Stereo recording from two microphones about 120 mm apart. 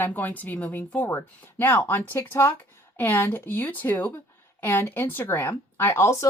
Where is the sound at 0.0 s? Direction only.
15° left (ahead or behind).